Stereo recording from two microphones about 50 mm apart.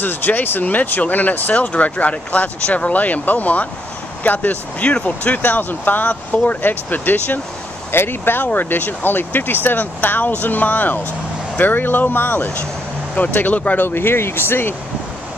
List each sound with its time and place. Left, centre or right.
0.0 s speech: left
1.5 s speech: left
7.9 s speech: left
13.8 s speech: left